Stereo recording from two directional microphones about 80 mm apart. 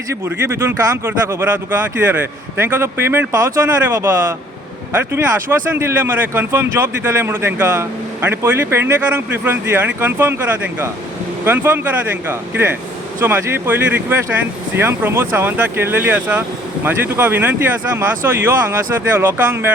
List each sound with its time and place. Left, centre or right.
0.1 s speech: right
3.3 s speech: right
3.8 s speech: right